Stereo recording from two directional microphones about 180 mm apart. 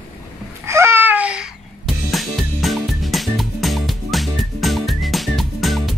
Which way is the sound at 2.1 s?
Centre (ahead or behind).